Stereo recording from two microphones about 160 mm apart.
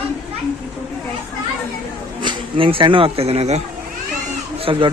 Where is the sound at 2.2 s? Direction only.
35° right (ahead or behind).